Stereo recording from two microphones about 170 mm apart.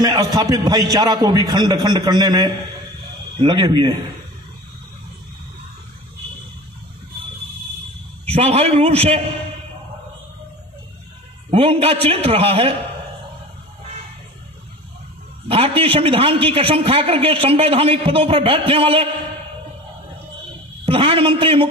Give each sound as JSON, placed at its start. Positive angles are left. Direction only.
{"t": 0.0, "sound": "a man's voice", "side_deg": -20}
{"t": 8.3, "sound": "a man's voice", "side_deg": -35}
{"t": 11.5, "sound": "a man's voice", "side_deg": -35}
{"t": 15.4, "sound": "a man's voice", "side_deg": -35}
{"t": 20.8, "sound": "a man's voice", "side_deg": -35}